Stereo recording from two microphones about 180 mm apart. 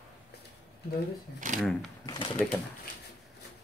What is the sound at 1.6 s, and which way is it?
Speech, centre (ahead or behind).